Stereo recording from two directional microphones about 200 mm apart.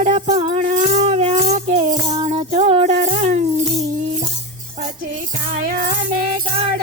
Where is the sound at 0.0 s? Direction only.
35° right (ahead or behind).